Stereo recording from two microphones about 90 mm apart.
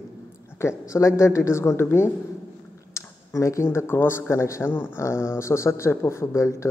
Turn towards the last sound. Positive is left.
turn(degrees=30)  # may be behind; listen again after turning